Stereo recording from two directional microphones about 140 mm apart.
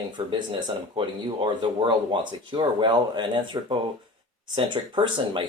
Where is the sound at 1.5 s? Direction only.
35° right (ahead or behind).